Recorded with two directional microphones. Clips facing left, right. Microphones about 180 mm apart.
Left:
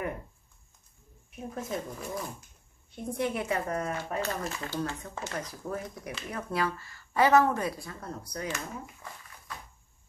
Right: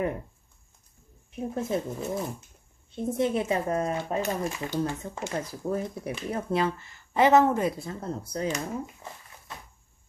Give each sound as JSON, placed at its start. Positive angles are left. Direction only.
{"t": 1.3, "sound": "speech", "side_deg": -25}